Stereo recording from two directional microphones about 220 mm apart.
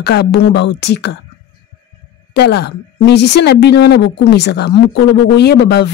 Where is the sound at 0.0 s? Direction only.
50° left (ahead or behind).